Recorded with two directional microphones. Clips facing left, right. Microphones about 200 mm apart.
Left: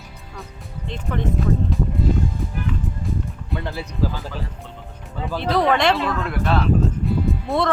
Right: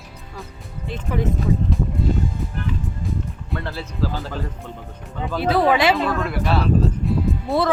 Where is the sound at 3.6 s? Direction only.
15° left (ahead or behind).